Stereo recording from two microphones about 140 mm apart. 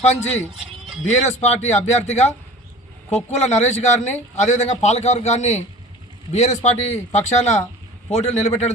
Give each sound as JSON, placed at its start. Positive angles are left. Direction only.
{"t": 1.1, "sound": "a man's voice", "side_deg": 50}